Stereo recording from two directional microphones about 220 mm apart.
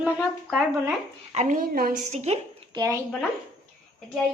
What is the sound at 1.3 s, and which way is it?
A woman's voice, 35° right (ahead or behind).